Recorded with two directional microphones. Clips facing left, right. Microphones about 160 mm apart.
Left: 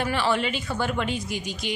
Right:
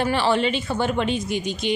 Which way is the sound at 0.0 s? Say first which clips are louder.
Right 4 dB; 30° right (ahead or behind).